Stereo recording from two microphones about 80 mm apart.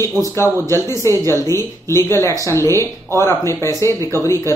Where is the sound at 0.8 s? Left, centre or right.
Left.